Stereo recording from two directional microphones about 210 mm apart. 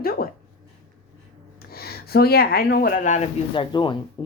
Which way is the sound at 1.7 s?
45° left (ahead or behind).